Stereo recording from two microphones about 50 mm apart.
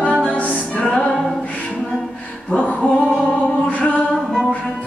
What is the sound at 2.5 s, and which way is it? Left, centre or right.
Music, left.